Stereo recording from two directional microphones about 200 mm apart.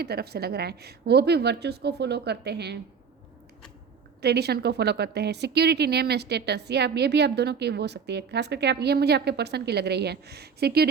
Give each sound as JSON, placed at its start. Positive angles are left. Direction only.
{"t": 0.0, "sound": "a woman's voice", "side_deg": -55}
{"t": 4.2, "sound": "a woman's voice", "side_deg": -55}